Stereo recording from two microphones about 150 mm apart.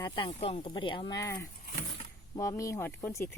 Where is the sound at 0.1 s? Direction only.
40° left (ahead or behind).